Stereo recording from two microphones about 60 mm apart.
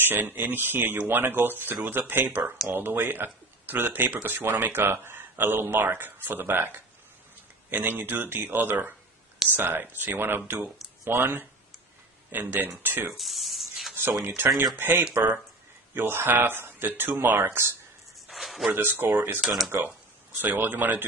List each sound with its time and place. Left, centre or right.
0.0 s speech: right
13.1 s a sound: centre
14.3 s speech: right
18.3 s a sound: centre
18.7 s speech: right
19.4 s speech: centre
20.4 s speech: right